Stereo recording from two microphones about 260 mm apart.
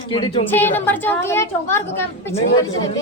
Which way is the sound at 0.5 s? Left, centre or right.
Centre.